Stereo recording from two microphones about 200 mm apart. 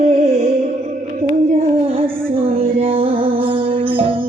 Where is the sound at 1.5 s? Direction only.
30° right (ahead or behind).